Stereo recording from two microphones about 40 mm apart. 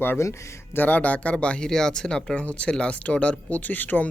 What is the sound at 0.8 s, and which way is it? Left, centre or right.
Speech, left.